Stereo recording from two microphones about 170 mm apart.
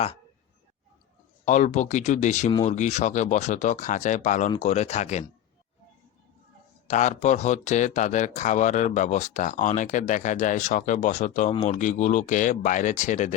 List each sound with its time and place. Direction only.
1.5 s speech: 45° left (ahead or behind)
6.8 s speech: 45° left (ahead or behind)